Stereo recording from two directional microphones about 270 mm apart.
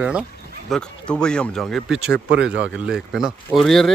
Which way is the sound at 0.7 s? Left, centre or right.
Centre.